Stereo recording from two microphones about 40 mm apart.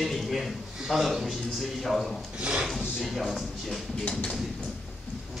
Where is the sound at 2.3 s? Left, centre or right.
Right.